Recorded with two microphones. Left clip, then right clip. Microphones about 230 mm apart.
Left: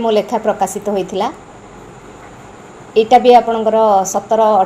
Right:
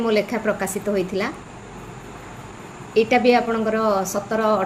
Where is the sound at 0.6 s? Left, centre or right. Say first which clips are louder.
Left 6 dB; centre.